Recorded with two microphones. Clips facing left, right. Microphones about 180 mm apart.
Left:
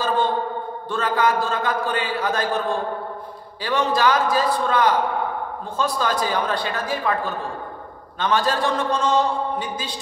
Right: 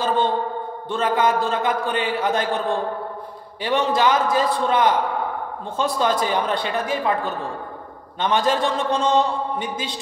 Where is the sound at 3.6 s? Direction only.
20° right (ahead or behind).